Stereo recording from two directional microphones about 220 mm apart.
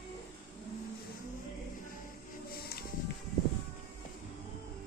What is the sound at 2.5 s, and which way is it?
Music, 45° left (ahead or behind).